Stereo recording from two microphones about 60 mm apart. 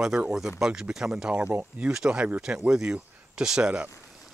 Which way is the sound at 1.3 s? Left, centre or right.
Right.